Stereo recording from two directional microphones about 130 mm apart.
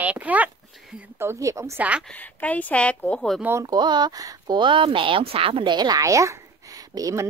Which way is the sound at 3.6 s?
35° right (ahead or behind).